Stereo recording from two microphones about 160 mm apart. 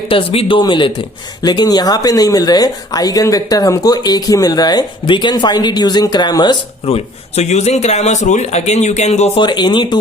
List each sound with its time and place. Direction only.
0.1 s a man's voice: 35° left (ahead or behind)
9.4 s speech: 30° left (ahead or behind)